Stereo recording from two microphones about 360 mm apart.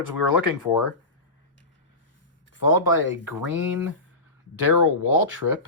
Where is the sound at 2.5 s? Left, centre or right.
Left.